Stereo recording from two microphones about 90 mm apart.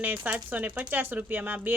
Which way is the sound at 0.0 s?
20° right (ahead or behind).